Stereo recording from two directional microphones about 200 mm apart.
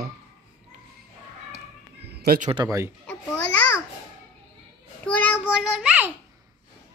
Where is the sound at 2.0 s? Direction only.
55° right (ahead or behind).